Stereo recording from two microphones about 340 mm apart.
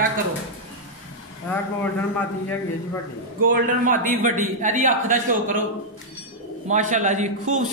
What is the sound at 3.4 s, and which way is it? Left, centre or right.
A man's voice, right.